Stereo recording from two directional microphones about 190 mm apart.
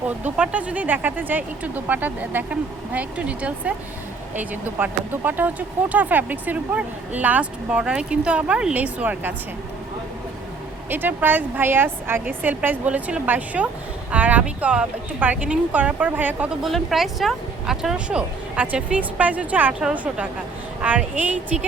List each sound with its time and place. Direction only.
0.3 s speech: 5° right (ahead or behind)
10.8 s speech: 10° right (ahead or behind)